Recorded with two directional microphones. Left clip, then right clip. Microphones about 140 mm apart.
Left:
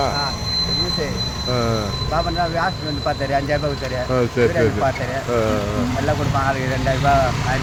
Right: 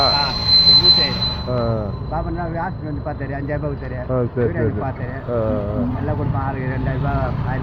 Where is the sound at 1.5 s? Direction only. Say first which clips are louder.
Left 2 dB; 50° left (ahead or behind).